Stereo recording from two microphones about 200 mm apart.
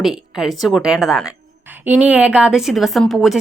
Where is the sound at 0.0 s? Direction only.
Centre (ahead or behind).